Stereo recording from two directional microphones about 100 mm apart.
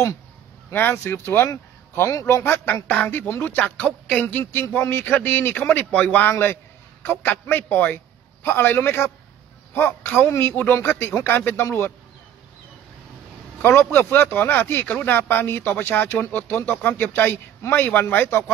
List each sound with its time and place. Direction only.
0.7 s a man's voice: 25° left (ahead or behind)
13.6 s speech: 20° left (ahead or behind)